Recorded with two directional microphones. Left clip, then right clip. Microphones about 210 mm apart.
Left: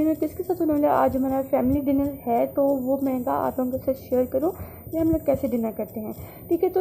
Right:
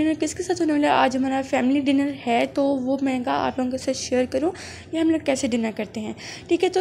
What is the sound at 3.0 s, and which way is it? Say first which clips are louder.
A woman's voice: right 1 dB; 20° right (ahead or behind).